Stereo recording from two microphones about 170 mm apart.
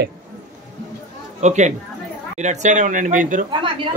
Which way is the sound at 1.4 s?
45° right (ahead or behind).